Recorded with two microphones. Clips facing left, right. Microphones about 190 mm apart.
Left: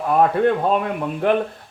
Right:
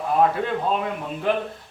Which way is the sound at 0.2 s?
55° left (ahead or behind).